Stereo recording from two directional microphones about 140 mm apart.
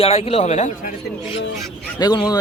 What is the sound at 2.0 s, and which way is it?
Speech, 30° left (ahead or behind).